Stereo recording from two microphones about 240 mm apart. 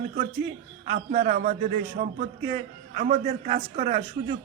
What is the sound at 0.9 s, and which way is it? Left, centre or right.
A man's voice, right.